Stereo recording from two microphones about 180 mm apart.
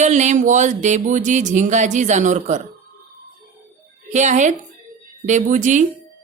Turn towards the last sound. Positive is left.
turn(degrees=-45)  # may be behind; listen again after turning